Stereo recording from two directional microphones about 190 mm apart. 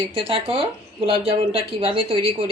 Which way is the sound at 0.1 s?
30° right (ahead or behind).